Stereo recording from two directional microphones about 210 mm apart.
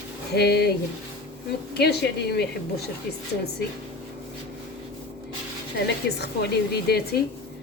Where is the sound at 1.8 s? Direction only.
50° left (ahead or behind).